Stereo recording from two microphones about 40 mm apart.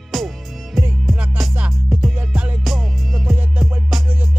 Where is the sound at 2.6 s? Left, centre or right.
Centre.